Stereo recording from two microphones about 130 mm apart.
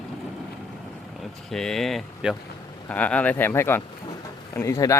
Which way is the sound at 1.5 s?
5° left (ahead or behind).